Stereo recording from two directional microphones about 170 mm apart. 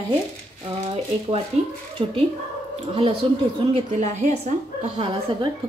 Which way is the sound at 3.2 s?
30° right (ahead or behind).